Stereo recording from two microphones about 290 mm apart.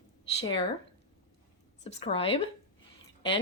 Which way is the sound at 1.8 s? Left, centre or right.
Left.